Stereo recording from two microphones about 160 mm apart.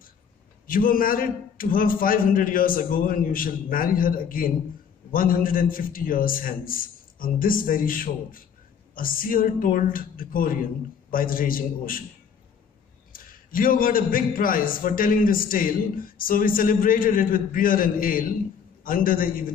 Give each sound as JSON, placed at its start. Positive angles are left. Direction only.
{"t": 0.7, "sound": "a man's voice", "side_deg": 60}
{"t": 13.1, "sound": "a man's voice", "side_deg": 60}